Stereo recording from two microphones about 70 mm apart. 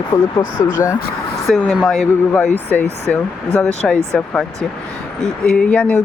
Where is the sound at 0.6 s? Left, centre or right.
Left.